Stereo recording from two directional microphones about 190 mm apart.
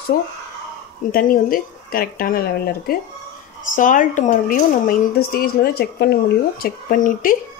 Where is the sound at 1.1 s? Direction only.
50° left (ahead or behind).